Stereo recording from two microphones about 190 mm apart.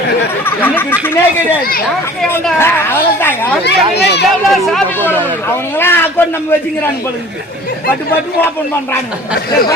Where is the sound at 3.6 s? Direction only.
65° left (ahead or behind).